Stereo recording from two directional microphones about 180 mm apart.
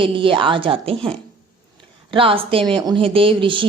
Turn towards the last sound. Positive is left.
turn(degrees=-30)  # may be behind; listen again after turning